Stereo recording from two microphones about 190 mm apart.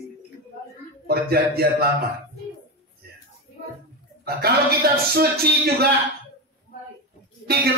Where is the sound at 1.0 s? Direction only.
55° right (ahead or behind).